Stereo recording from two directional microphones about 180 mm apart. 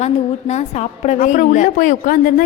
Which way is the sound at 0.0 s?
40° left (ahead or behind).